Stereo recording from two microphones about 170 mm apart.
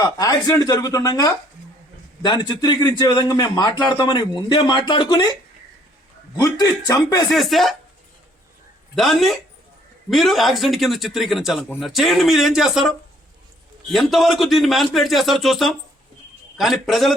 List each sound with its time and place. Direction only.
0.0 s speech: 20° left (ahead or behind)
7.3 s a man's voice: centre (ahead or behind)
9.0 s a man's voice: centre (ahead or behind)
13.9 s a man's voice: centre (ahead or behind)